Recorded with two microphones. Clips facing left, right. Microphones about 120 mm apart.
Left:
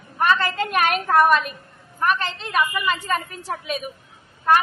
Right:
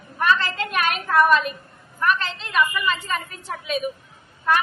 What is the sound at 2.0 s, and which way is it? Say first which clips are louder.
A woman's voice: even; 45° left (ahead or behind).